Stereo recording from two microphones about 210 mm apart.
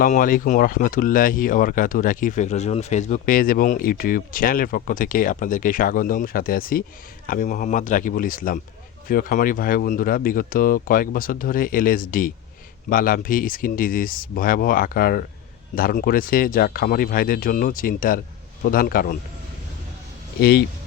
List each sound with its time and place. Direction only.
0.0 s speech: 40° left (ahead or behind)
20.4 s speech: 50° left (ahead or behind)